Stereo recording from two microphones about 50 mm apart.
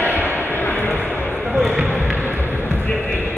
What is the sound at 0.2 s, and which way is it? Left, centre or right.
Vehicle, left.